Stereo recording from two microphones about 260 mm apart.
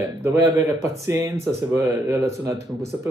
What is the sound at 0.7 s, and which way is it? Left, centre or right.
Speech, centre.